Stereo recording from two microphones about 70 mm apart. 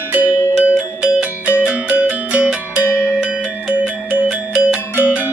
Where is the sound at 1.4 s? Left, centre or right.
Left.